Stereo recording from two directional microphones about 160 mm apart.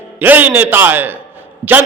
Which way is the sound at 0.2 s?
10° right (ahead or behind).